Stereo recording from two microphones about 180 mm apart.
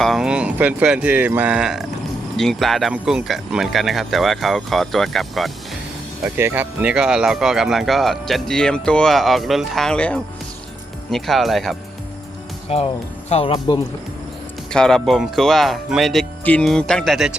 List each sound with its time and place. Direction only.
0.0 s speech: centre (ahead or behind)
6.2 s speech: 10° right (ahead or behind)
12.6 s speech: 35° left (ahead or behind)
14.7 s speech: 5° left (ahead or behind)